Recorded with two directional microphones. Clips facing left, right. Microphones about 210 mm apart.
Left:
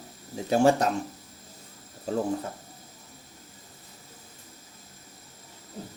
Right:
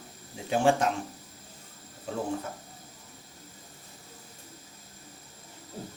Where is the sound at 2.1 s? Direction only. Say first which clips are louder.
Left 6 dB; 40° left (ahead or behind).